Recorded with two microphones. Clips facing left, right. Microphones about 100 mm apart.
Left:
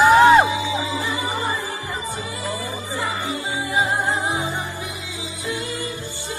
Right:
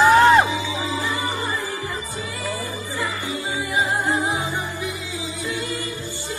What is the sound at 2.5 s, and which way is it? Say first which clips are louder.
Music: left 1 dB; 20° left (ahead or behind).